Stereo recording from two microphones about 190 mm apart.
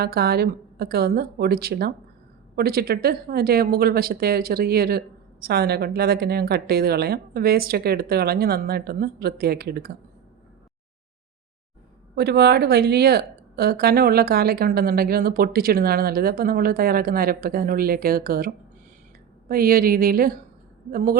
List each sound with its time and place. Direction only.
0.0 s speech: 55° right (ahead or behind)
12.1 s speech: 60° right (ahead or behind)